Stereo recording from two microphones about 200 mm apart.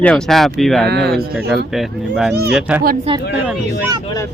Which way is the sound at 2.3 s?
55° right (ahead or behind).